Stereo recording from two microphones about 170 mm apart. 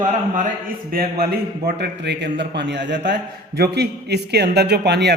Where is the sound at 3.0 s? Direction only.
60° right (ahead or behind).